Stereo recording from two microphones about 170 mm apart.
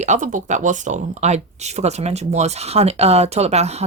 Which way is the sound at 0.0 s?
45° right (ahead or behind).